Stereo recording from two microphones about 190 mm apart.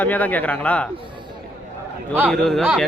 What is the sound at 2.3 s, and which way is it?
Speech, centre (ahead or behind).